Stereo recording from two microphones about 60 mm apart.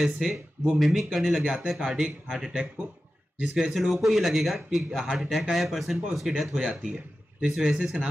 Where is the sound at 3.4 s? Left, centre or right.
Centre.